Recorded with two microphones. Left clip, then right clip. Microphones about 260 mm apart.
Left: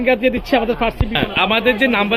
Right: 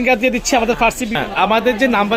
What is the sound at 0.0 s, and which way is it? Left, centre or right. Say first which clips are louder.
Speech: right 1 dB; centre.